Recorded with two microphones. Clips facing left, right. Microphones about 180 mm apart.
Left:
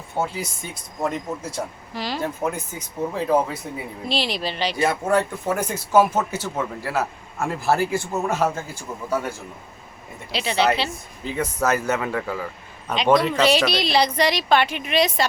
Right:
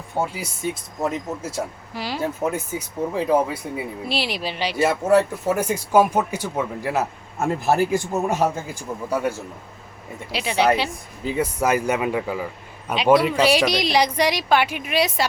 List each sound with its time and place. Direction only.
0.3 s speech: 5° right (ahead or behind)
10.3 s speech: 10° right (ahead or behind)